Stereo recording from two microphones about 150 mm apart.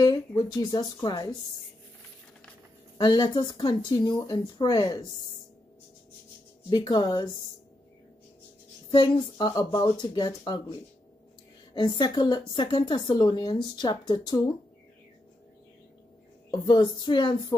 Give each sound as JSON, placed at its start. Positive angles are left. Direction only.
{"t": 0.0, "sound": "a woman's voice", "side_deg": 25}
{"t": 3.0, "sound": "a woman's voice", "side_deg": 30}
{"t": 6.7, "sound": "a woman's voice", "side_deg": 30}
{"t": 8.9, "sound": "a woman's voice", "side_deg": 30}
{"t": 16.4, "sound": "a woman's voice", "side_deg": 30}